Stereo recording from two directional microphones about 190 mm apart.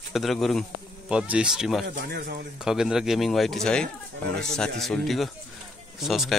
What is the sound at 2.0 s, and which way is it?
Speech, 55° right (ahead or behind).